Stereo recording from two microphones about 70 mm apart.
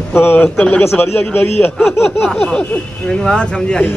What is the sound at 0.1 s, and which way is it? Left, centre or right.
A man's voice, left.